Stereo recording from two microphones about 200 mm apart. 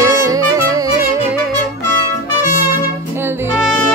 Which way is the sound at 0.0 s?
15° right (ahead or behind).